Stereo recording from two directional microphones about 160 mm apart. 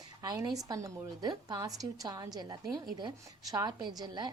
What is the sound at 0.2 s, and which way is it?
A woman's voice, 20° right (ahead or behind).